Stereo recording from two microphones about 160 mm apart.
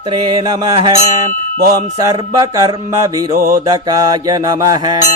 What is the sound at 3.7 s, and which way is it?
Mantra, 25° right (ahead or behind).